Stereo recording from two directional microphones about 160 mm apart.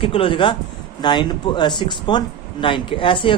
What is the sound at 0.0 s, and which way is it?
Speech, 35° left (ahead or behind).